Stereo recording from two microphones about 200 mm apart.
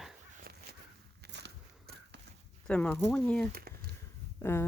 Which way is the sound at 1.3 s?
60° right (ahead or behind).